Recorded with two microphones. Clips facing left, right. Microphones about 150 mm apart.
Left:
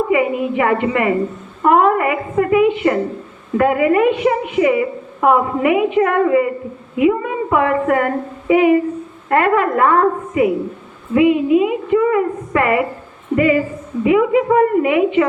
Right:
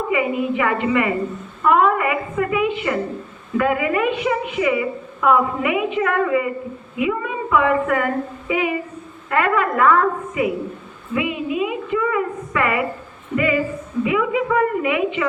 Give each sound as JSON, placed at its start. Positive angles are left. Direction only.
{"t": 0.1, "sound": "a woman's voice", "side_deg": 50}